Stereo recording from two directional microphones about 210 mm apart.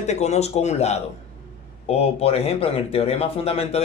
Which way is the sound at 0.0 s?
30° left (ahead or behind).